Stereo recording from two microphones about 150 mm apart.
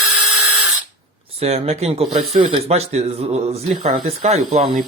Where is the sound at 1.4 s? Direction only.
40° right (ahead or behind).